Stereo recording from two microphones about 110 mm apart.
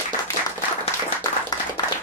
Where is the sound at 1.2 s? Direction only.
35° left (ahead or behind).